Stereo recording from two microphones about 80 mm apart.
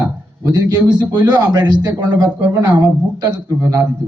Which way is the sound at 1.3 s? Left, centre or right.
Right.